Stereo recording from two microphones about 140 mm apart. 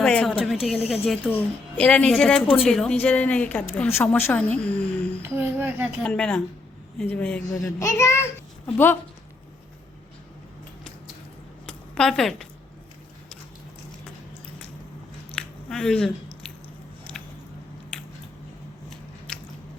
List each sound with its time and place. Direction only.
0.0 s speech: 5° left (ahead or behind)
1.4 s speech: 10° left (ahead or behind)
5.2 s speech: 15° right (ahead or behind)
6.0 s speech: 10° left (ahead or behind)
7.5 s a child's voice: 20° left (ahead or behind)
11.6 s a sound: 5° left (ahead or behind)
15.3 s squish: 5° left (ahead or behind)
17.0 s a sound: 5° left (ahead or behind)